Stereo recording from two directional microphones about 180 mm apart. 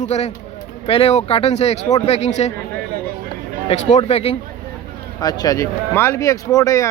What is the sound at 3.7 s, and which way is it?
Speech, 35° left (ahead or behind).